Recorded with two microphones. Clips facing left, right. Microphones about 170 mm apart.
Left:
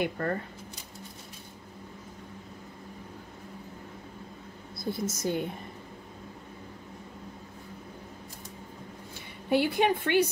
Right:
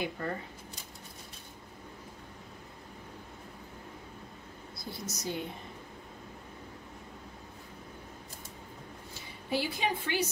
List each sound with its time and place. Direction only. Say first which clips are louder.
0.0 s speech: left 5 dB; 60° left (ahead or behind)
4.9 s a woman's voice: left 6 dB; 50° left (ahead or behind)
9.1 s a woman's voice: left 7 dB; 60° left (ahead or behind)